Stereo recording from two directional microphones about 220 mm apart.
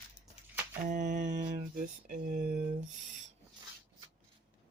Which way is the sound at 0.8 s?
35° right (ahead or behind).